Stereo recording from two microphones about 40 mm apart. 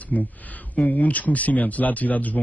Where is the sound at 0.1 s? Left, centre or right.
Left.